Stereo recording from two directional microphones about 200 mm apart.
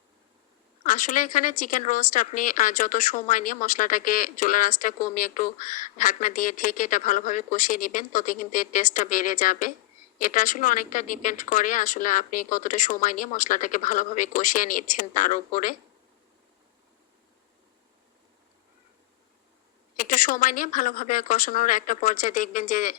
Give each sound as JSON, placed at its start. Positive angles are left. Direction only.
{"t": 0.9, "sound": "speech", "side_deg": 40}
{"t": 20.0, "sound": "speech", "side_deg": 40}